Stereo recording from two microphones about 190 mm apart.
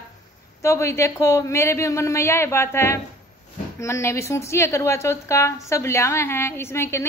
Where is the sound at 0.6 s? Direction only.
15° left (ahead or behind).